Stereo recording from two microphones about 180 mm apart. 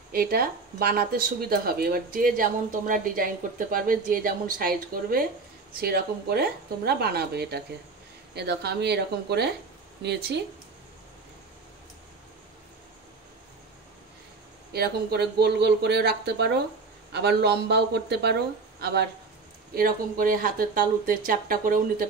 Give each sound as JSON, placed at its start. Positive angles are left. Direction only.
{"t": 0.1, "sound": "speech", "side_deg": -55}
{"t": 14.7, "sound": "speech", "side_deg": -60}
{"t": 19.7, "sound": "speech", "side_deg": -50}